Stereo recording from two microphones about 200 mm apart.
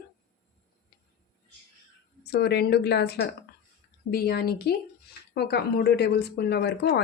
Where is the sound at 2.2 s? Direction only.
55° left (ahead or behind).